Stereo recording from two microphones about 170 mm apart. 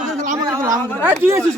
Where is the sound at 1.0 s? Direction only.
15° right (ahead or behind).